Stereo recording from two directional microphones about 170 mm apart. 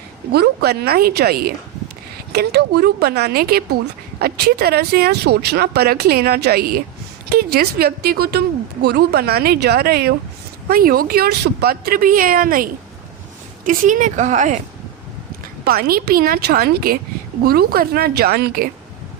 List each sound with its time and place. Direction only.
0.3 s a woman's voice: 70° right (ahead or behind)
13.7 s speech: 50° right (ahead or behind)
15.6 s a woman's voice: 60° right (ahead or behind)